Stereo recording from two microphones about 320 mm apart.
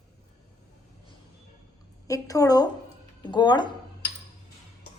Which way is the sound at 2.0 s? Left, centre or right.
Centre.